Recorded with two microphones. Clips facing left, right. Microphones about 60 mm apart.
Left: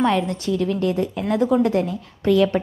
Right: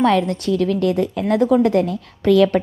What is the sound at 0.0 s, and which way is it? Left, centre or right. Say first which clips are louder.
A woman's voice: right 3 dB; right.